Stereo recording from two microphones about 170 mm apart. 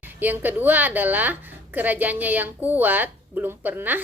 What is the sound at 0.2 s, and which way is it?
A woman's voice, 10° right (ahead or behind).